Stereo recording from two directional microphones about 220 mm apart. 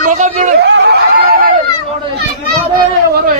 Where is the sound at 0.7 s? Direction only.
50° right (ahead or behind).